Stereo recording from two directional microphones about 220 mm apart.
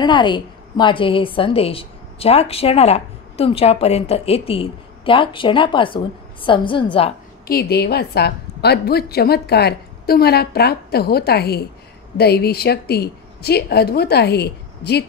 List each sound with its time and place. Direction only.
0.0 s a woman's voice: 20° left (ahead or behind)
7.4 s a woman's voice: 45° left (ahead or behind)